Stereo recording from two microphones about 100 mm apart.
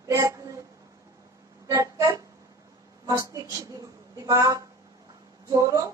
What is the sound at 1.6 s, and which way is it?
Music, 35° right (ahead or behind).